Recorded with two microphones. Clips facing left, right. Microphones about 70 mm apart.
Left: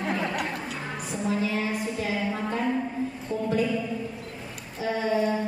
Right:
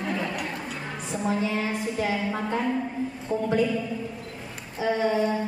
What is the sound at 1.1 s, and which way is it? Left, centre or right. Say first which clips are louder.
A woman's voice: right 1 dB; right.